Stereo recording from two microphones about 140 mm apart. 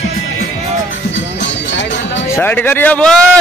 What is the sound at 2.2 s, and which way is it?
Speech, 15° left (ahead or behind).